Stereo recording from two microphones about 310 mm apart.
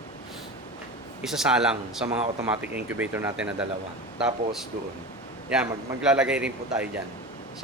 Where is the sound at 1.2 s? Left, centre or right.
Centre.